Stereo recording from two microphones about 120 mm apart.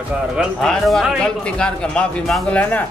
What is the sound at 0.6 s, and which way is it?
A man's voice, 5° left (ahead or behind).